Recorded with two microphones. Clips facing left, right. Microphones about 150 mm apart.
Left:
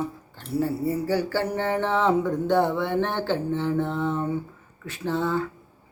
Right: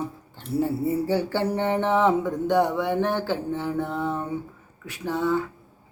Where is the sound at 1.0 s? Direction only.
20° right (ahead or behind).